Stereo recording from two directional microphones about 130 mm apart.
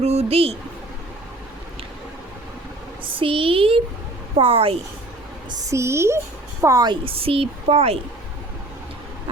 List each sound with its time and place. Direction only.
0.0 s a woman's voice: 55° right (ahead or behind)
3.0 s a woman's voice: 40° right (ahead or behind)
5.5 s a woman's voice: 25° right (ahead or behind)
6.8 s a woman's voice: 40° right (ahead or behind)